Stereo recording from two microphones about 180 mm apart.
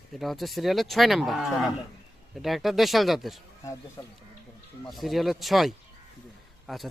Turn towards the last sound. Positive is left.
turn(degrees=0)  # may be behind; listen again after turning